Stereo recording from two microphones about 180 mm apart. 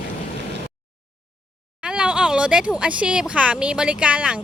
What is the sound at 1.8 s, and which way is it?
Speech, 5° right (ahead or behind).